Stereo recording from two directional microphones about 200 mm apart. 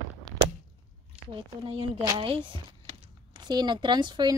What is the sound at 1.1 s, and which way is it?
Speech, 25° right (ahead or behind).